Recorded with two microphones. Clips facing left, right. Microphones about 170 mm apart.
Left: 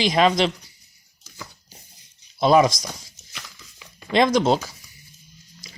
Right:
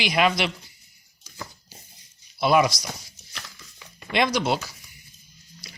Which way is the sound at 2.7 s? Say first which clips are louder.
Left 3 dB; 90° left.